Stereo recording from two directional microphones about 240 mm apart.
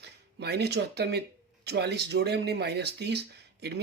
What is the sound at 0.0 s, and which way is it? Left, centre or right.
Speech, right.